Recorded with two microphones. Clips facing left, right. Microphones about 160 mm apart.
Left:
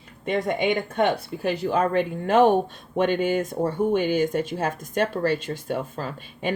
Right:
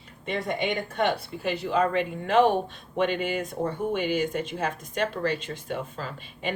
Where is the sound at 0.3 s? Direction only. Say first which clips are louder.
Left 5 dB; 45° left (ahead or behind).